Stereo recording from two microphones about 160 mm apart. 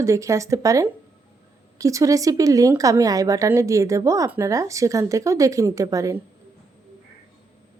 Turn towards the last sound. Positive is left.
turn(degrees=-20)  # may be behind; listen again after turning